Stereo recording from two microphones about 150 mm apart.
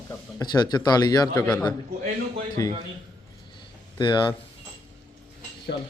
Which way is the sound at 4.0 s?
30° left (ahead or behind).